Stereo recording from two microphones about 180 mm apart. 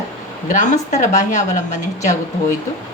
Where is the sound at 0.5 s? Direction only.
45° left (ahead or behind).